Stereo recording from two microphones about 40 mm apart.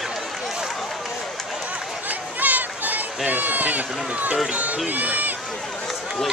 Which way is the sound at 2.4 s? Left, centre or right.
Right.